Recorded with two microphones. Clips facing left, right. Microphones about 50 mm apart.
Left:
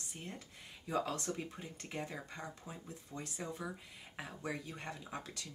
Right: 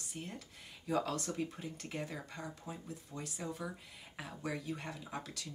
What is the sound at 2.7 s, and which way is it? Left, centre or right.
Speech, right.